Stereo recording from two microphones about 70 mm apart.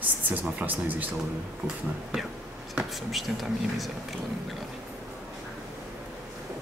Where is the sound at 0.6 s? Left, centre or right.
Right.